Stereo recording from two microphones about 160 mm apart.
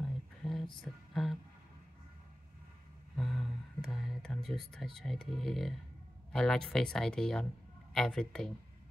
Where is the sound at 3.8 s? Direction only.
5° left (ahead or behind).